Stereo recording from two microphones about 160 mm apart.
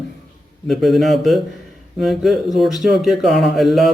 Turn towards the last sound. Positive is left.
turn(degrees=0)  # may be behind; listen again after turning